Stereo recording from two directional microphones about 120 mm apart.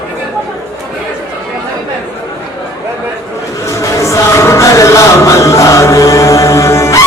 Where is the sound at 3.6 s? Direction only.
25° left (ahead or behind).